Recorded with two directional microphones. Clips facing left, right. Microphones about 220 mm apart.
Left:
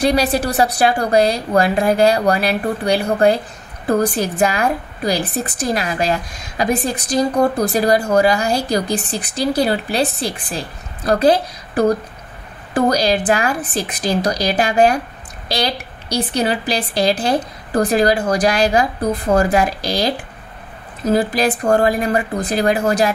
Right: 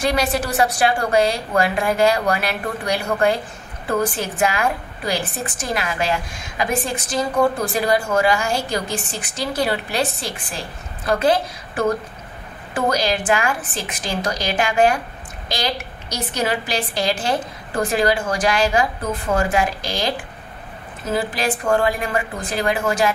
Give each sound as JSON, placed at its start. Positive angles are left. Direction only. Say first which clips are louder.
{"t": 0.0, "sound": "a woman's voice", "louder": "left 4 dB", "side_deg": 35}